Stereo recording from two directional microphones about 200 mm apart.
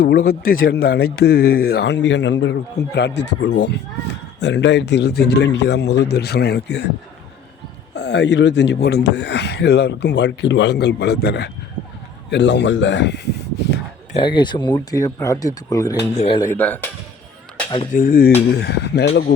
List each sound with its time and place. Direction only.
0.0 s speech: 50° left (ahead or behind)
7.9 s speech: 60° left (ahead or behind)
14.1 s speech: 25° left (ahead or behind)
16.1 s speech: 30° left (ahead or behind)
16.4 s speech: 10° left (ahead or behind)
17.9 s speech: 45° left (ahead or behind)
18.5 s speech: 55° left (ahead or behind)